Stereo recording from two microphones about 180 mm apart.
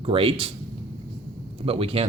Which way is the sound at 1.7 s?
30° right (ahead or behind).